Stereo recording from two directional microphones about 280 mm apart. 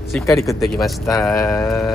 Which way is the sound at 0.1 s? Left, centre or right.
Centre.